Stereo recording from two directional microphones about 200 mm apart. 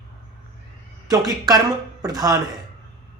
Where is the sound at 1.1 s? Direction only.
20° right (ahead or behind).